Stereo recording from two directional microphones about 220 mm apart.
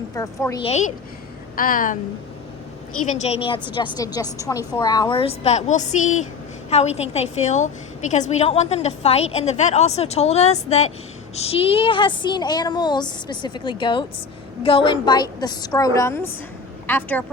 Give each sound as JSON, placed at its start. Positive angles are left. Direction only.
{"t": 0.1, "sound": "a woman's voice", "side_deg": 15}
{"t": 0.6, "sound": "a woman's voice", "side_deg": 30}
{"t": 3.1, "sound": "a woman's voice", "side_deg": 30}